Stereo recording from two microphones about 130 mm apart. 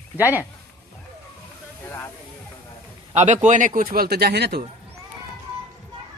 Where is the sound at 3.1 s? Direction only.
65° right (ahead or behind); by 3.9 s 85° right.